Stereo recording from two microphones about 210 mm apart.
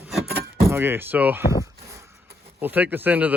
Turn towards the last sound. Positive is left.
turn(degrees=-10)  # may be behind; listen again after turning